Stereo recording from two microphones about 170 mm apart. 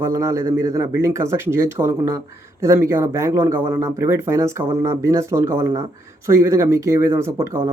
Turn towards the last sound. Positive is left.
turn(degrees=-15)  # may be behind; listen again after turning